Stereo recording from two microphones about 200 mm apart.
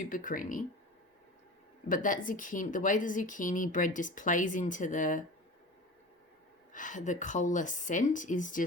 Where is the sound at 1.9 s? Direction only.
40° left (ahead or behind).